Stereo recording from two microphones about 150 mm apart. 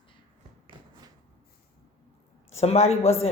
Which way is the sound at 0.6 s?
25° right (ahead or behind).